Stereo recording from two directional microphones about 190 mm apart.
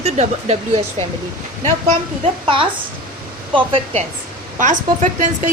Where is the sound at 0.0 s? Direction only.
35° right (ahead or behind).